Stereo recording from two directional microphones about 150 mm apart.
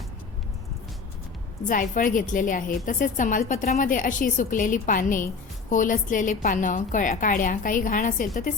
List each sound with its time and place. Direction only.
1.6 s a woman's voice: 65° left (ahead or behind)